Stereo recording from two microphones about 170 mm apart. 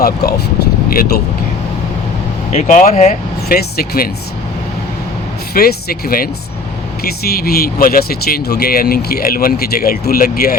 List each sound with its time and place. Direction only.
0.0 s speech: 65° left (ahead or behind)
2.5 s speech: 45° left (ahead or behind); by 4.1 s 65° left (ahead or behind)
5.5 s speech: 65° left (ahead or behind)